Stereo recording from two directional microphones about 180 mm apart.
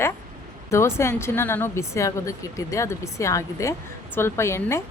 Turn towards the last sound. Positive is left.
turn(degrees=15)  # may be behind; listen again after turning